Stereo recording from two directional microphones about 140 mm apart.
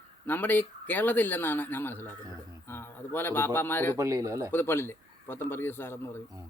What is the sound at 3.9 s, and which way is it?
Speech, 25° right (ahead or behind).